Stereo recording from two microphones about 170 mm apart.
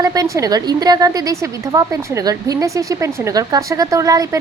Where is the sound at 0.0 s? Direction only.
20° right (ahead or behind).